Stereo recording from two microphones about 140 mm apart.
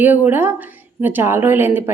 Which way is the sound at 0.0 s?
15° right (ahead or behind).